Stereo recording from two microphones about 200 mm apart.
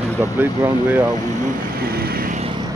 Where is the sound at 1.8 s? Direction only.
50° right (ahead or behind).